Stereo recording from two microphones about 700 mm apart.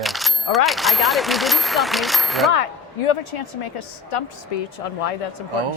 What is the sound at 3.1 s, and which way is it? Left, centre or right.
Speech, left.